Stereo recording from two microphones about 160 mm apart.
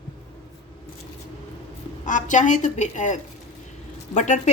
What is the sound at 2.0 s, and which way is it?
A woman's voice, 50° left (ahead or behind).